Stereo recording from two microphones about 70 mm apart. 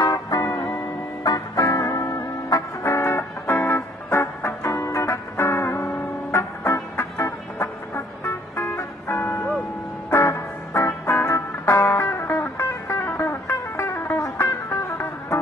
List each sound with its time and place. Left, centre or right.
0.0 s music: left
0.6 s music: left
2.8 s music: left
14.2 s music: left